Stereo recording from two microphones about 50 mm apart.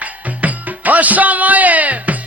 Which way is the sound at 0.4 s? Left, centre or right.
Right.